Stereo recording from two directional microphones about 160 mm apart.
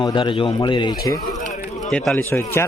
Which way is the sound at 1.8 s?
5° left (ahead or behind).